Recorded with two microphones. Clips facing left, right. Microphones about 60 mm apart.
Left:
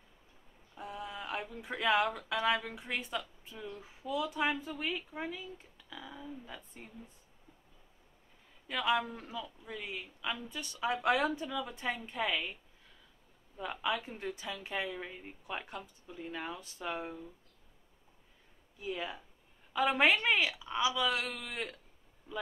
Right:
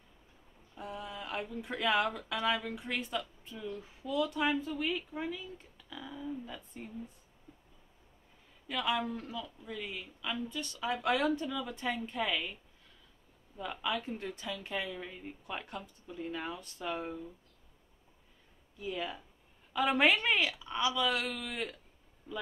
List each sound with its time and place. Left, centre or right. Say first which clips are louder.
0.7 s speech: even; centre
5.9 s speech: right 4 dB; centre
8.6 s speech: left 1 dB; centre
13.6 s speech: left 1 dB; centre
18.8 s a woman's voice: right 1 dB; centre